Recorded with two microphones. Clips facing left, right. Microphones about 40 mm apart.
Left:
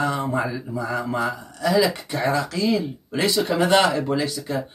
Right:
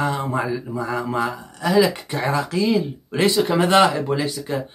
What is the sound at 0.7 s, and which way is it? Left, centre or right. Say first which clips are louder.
Speech: right 1 dB; right.